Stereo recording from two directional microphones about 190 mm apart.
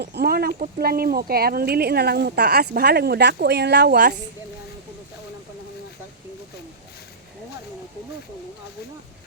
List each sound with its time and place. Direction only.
0.0 s speech: 60° right (ahead or behind)